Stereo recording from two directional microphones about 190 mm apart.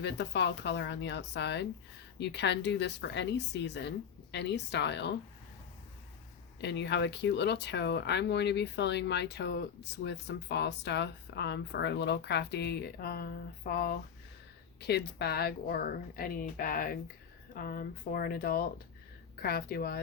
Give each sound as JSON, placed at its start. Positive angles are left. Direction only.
{"t": 0.0, "sound": "speech", "side_deg": 65}
{"t": 6.6, "sound": "speech", "side_deg": 65}